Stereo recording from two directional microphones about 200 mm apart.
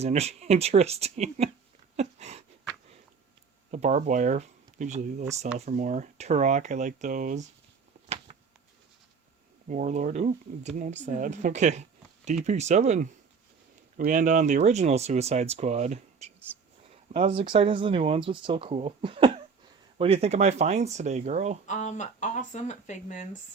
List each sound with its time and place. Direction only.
0.0 s speech: 35° right (ahead or behind)
2.0 s a sound: 35° right (ahead or behind)
3.7 s speech: 35° right (ahead or behind)
9.6 s speech: 40° right (ahead or behind)
21.7 s speech: 35° left (ahead or behind)